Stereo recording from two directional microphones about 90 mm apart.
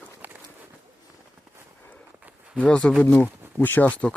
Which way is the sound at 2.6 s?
10° left (ahead or behind).